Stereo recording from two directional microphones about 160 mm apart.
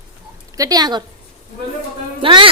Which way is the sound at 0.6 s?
25° right (ahead or behind).